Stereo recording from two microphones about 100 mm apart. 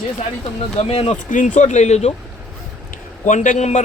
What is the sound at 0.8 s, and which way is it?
A man's voice, 85° left.